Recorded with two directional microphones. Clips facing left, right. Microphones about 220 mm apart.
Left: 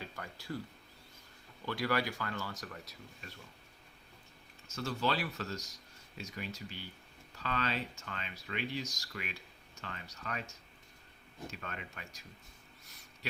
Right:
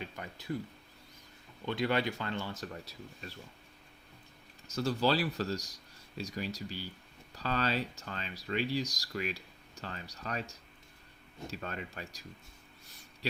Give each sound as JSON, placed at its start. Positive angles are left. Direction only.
{"t": 0.0, "sound": "a sound", "side_deg": -20}
{"t": 1.6, "sound": "speech", "side_deg": -20}
{"t": 4.7, "sound": "speech", "side_deg": -35}